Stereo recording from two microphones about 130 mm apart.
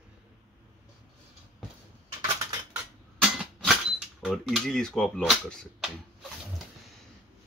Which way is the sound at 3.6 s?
Centre (ahead or behind).